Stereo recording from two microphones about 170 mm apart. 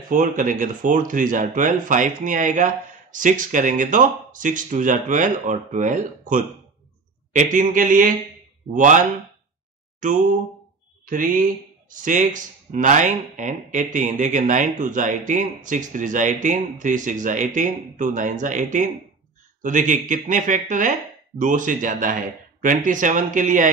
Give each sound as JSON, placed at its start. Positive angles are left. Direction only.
{"t": 0.1, "sound": "speech", "side_deg": -50}
{"t": 9.9, "sound": "a sound", "side_deg": -50}
{"t": 11.1, "sound": "speech", "side_deg": -55}